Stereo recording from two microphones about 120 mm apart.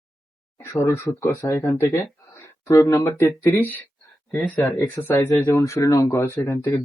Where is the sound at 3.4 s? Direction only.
15° left (ahead or behind).